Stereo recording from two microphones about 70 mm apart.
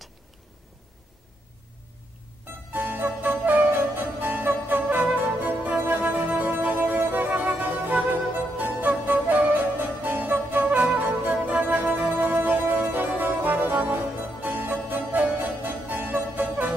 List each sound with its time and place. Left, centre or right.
2.7 s music: right
14.4 s harpsichord: right